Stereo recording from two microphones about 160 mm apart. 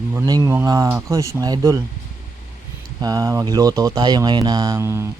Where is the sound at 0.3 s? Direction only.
25° right (ahead or behind).